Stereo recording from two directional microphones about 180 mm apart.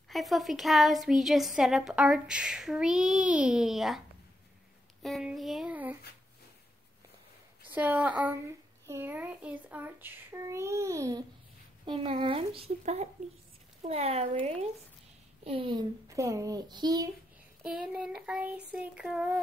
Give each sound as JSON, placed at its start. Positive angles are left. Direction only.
{"t": 0.1, "sound": "speech", "side_deg": 0}
{"t": 5.0, "sound": "speech", "side_deg": 0}
{"t": 7.7, "sound": "speech", "side_deg": -10}
{"t": 11.8, "sound": "a child's voice", "side_deg": -30}
{"t": 16.1, "sound": "a child's voice", "side_deg": -15}
{"t": 17.6, "sound": "speech", "side_deg": -5}